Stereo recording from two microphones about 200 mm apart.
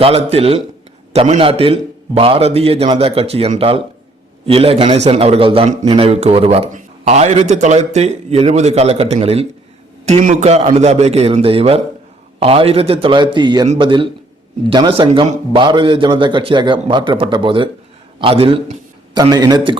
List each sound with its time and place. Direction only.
0.0 s a man's voice: 30° right (ahead or behind)